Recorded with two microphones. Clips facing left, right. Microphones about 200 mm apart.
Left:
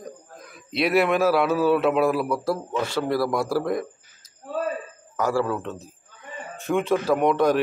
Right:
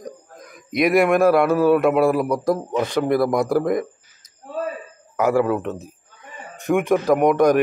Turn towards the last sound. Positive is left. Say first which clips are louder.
# right 4 dB
turn(degrees=-15)  # may be behind; listen again after turning